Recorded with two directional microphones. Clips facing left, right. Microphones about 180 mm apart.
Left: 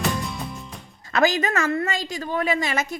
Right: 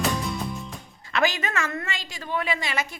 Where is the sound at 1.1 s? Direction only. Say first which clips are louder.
Left 4 dB; 40° left (ahead or behind).